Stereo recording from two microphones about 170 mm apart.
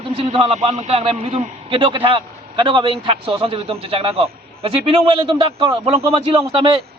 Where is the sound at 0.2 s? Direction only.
35° right (ahead or behind).